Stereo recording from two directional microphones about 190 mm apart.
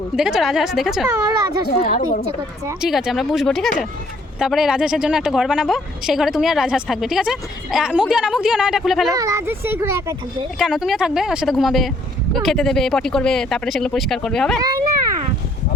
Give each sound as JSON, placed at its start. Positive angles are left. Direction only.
{"t": 0.2, "sound": "a woman's voice", "side_deg": 0}
{"t": 1.7, "sound": "a woman's voice", "side_deg": 40}
{"t": 2.8, "sound": "a woman's voice", "side_deg": 0}
{"t": 9.1, "sound": "a child's voice", "side_deg": -15}
{"t": 10.6, "sound": "a woman's voice", "side_deg": 0}